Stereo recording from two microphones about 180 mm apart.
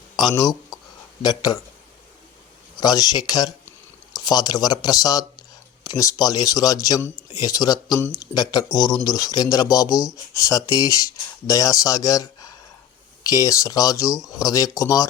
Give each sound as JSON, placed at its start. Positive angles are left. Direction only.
{"t": 0.2, "sound": "speech", "side_deg": 20}
{"t": 2.7, "sound": "speech", "side_deg": 20}